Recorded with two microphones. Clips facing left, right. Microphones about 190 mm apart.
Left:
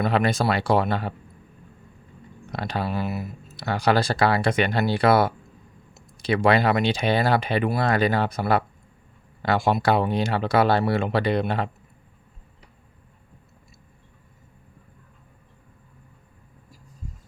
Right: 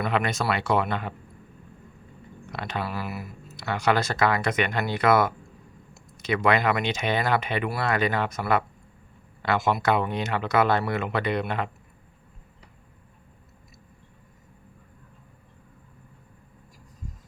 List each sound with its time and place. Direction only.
0.0 s speech: 35° left (ahead or behind)
2.5 s speech: 35° left (ahead or behind)